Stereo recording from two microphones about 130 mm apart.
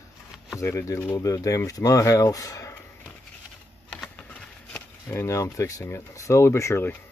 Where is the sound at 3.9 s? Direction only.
10° left (ahead or behind).